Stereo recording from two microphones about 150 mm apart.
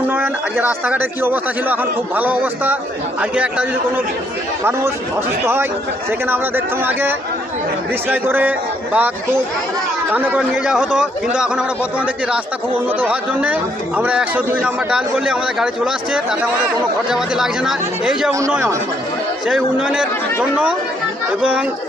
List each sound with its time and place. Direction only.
0.9 s a man's voice: 15° right (ahead or behind)
6.1 s a man's voice: 15° right (ahead or behind)
13.0 s a man's voice: 10° right (ahead or behind)
18.3 s speech: 20° right (ahead or behind)
19.5 s a man's voice: 5° right (ahead or behind)